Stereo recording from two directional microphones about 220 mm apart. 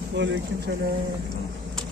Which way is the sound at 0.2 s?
50° right (ahead or behind).